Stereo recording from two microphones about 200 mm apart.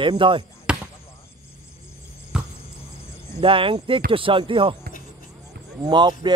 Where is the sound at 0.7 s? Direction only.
5° right (ahead or behind).